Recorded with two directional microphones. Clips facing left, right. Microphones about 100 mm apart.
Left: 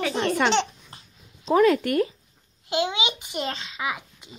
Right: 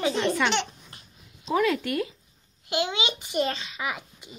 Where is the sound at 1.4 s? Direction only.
40° left (ahead or behind).